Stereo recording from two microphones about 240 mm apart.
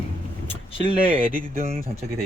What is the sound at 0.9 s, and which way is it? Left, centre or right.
Speech, right.